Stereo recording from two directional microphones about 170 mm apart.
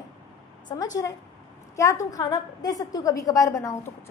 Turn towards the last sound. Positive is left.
turn(degrees=15)  # may be behind; listen again after turning